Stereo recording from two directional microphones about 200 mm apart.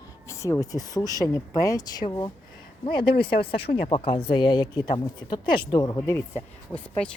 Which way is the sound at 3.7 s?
25° left (ahead or behind).